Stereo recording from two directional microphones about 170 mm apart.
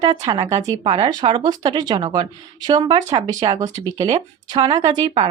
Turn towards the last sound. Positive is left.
turn(degrees=-30)  # may be behind; listen again after turning